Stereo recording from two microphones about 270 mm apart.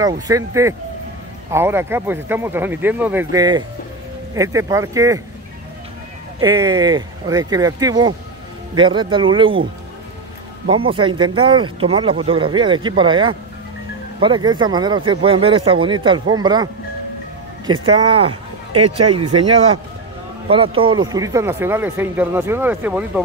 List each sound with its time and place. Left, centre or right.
0.3 s speech: centre
1.5 s speech: centre
6.4 s speech: centre
10.7 s speech: centre
17.8 s speech: centre
20.4 s speech: centre